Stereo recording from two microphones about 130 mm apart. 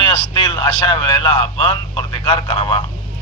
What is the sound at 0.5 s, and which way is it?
A man's voice, 35° left (ahead or behind).